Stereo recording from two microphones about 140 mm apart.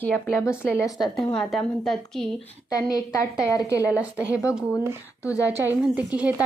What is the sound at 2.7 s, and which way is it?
A woman's voice, 25° left (ahead or behind).